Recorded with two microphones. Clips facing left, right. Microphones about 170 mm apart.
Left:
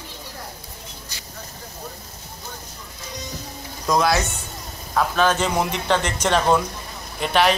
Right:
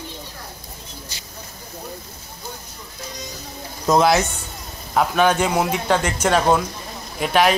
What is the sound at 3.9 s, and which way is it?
Speech, 25° right (ahead or behind).